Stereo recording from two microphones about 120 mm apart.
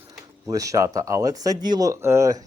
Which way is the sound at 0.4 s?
25° right (ahead or behind).